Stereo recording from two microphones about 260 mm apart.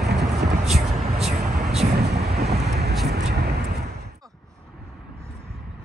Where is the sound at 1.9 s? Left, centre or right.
Right.